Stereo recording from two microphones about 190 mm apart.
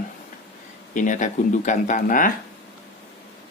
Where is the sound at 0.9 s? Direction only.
40° left (ahead or behind).